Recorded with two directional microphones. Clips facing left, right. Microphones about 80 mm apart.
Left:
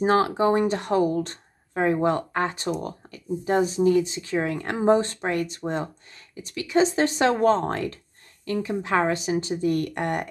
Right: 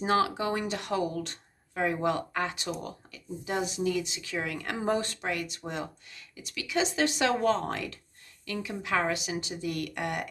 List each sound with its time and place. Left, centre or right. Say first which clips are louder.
0.0 s speech: left 6 dB; left